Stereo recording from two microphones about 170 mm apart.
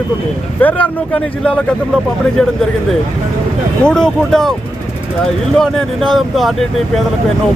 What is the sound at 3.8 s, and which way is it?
Speech, 5° left (ahead or behind).